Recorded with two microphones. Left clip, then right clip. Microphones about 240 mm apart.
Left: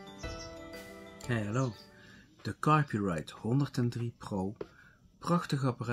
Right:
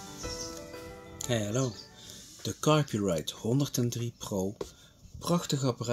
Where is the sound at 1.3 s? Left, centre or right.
Centre.